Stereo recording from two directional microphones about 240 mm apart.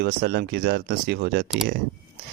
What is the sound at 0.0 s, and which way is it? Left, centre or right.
Speech, right.